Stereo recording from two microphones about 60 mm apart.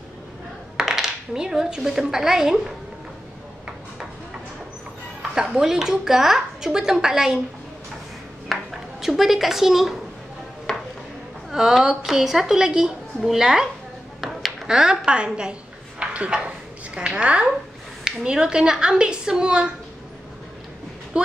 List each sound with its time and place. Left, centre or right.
0.7 s speech: centre
5.3 s a woman's voice: centre
9.0 s a woman's voice: centre
10.7 s chopping: centre
11.5 s a woman's voice: centre
14.2 s a sound: centre
15.0 s a woman's voice: centre
16.0 s dishes: centre
18.0 s a woman's voice: centre